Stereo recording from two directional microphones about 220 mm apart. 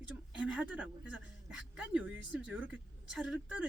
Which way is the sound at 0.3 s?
5° right (ahead or behind).